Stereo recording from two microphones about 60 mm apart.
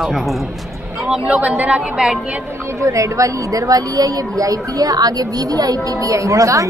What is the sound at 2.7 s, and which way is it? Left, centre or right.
A woman's voice, right.